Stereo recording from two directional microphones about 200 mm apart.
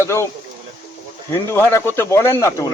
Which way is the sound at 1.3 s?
10° left (ahead or behind).